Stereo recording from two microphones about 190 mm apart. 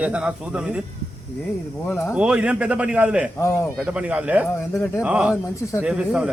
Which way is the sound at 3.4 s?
15° left (ahead or behind).